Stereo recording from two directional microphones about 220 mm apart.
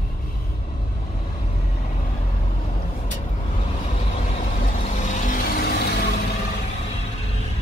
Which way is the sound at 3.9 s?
35° left (ahead or behind).